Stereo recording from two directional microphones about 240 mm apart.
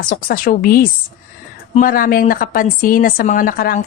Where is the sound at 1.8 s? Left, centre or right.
Left.